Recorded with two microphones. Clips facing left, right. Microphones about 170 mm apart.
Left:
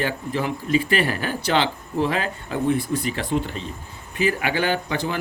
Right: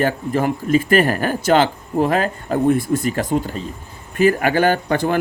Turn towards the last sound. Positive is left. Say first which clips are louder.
# right 7 dB
turn(degrees=-50)  # may be behind; listen again after turning